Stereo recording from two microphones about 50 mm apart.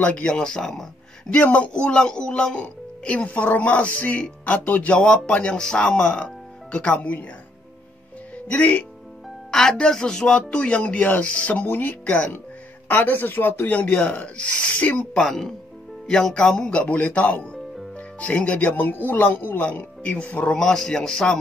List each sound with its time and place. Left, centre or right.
0.0 s speech: left
1.3 s speech: left
5.6 s speech: centre
5.9 s speech: left
8.5 s speech: left
9.5 s speech: centre; by 11.6 s left
11.6 s speech: left
13.7 s speech: left
15.1 s speech: centre; by 18.8 s left
19.0 s speech: left
20.5 s speech: centre